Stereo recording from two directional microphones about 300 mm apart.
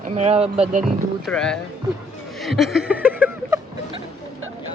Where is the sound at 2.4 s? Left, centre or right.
Centre.